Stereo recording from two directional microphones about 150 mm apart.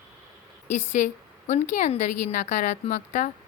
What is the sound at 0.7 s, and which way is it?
A woman's voice, 55° left (ahead or behind).